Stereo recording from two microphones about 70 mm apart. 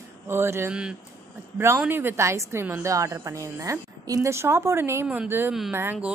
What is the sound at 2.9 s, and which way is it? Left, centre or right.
Speech, right.